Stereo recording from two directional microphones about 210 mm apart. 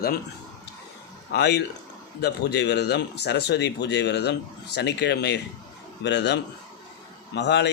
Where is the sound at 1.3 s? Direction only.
50° left (ahead or behind).